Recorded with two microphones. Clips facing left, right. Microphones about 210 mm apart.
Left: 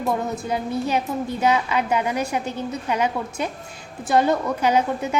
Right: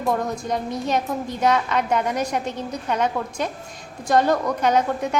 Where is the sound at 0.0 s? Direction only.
5° left (ahead or behind).